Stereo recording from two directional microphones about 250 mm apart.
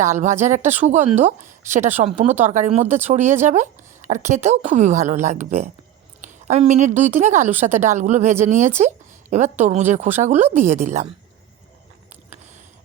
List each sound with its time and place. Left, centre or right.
0.0 s a woman's voice: right